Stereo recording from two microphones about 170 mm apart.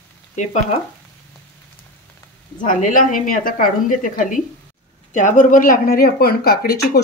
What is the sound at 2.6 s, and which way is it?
Speech, 50° left (ahead or behind).